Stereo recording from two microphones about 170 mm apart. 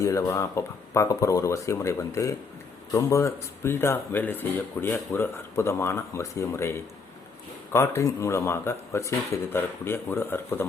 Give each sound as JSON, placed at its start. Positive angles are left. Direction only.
{"t": 0.0, "sound": "speech", "side_deg": 20}